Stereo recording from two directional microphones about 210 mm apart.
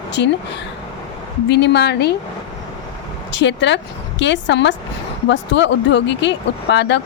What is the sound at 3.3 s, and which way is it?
A woman's voice, 60° left (ahead or behind).